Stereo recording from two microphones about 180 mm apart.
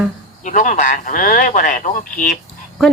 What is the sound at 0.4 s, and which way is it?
Speech, 45° left (ahead or behind).